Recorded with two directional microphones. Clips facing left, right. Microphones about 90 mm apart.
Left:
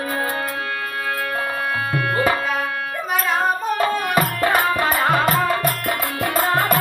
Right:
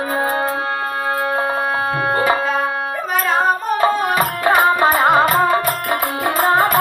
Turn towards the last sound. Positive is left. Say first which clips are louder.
# right 4 dB
turn(degrees=-25)  # may be behind; listen again after turning